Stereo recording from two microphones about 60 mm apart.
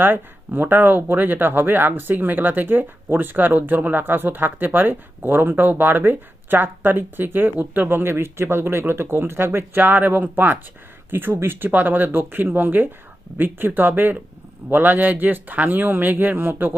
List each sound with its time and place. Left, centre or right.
0.0 s speech: right